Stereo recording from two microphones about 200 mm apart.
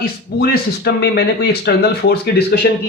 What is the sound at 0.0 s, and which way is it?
Speech, 50° left (ahead or behind).